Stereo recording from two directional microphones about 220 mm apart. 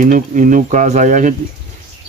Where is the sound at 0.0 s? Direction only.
35° right (ahead or behind).